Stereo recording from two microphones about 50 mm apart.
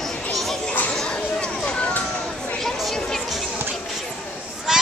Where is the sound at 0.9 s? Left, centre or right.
Centre.